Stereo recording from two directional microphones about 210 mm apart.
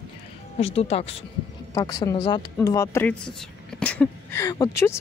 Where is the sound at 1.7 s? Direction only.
15° left (ahead or behind).